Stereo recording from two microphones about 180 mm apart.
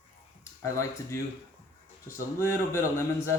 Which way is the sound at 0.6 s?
15° left (ahead or behind).